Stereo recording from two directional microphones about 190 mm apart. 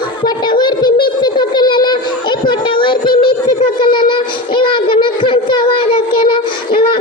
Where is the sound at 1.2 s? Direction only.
25° left (ahead or behind).